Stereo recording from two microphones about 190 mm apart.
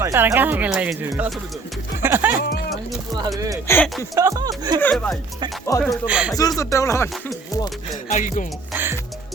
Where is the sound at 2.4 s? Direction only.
60° left (ahead or behind).